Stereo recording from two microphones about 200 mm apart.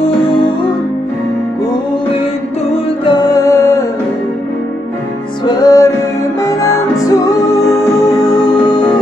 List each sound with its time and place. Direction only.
3.1 s music: 20° left (ahead or behind)
5.4 s music: 20° left (ahead or behind)
8.6 s music: 20° left (ahead or behind)